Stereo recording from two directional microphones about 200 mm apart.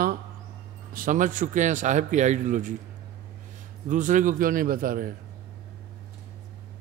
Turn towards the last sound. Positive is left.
turn(degrees=-45)  # may be behind; listen again after turning